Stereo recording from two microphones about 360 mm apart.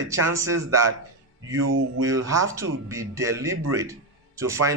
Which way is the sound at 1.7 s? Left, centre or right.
Right.